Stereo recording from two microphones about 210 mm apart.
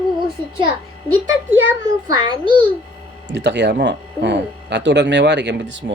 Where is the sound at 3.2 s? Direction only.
55° right (ahead or behind).